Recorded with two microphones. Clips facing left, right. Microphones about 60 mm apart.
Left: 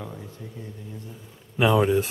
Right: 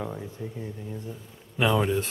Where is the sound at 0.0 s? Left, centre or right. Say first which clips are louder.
Right 4 dB; centre.